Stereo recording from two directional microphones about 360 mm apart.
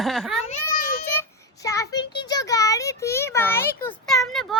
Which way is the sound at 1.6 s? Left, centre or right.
Centre.